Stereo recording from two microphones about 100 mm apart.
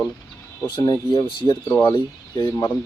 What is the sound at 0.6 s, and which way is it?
Speech, 55° left (ahead or behind).